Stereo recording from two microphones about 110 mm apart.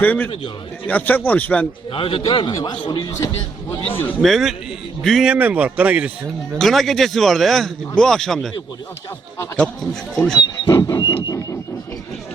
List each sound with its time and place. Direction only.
0.0 s speech: 15° left (ahead or behind)
1.9 s a man's voice: 55° left (ahead or behind)
2.6 s a sound: 45° left (ahead or behind)
3.9 s speech: 15° left (ahead or behind)
4.2 s speech: centre (ahead or behind)
5.2 s speech: 10° right (ahead or behind)
6.6 s speech: centre (ahead or behind)
9.8 s speech: 5° left (ahead or behind)
10.3 s a sound: 30° left (ahead or behind)